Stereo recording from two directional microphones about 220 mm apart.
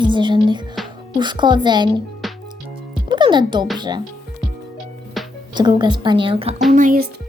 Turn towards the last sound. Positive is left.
turn(degrees=-40)  # may be behind; listen again after turning